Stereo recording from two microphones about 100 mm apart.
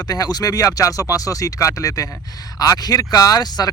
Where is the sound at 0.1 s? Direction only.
40° left (ahead or behind).